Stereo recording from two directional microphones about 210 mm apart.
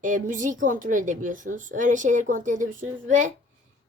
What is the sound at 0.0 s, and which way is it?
A woman's voice, 40° right (ahead or behind).